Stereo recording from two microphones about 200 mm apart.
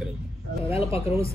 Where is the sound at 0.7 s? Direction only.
30° left (ahead or behind).